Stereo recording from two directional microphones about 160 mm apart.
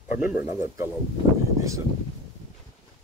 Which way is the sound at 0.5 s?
20° right (ahead or behind).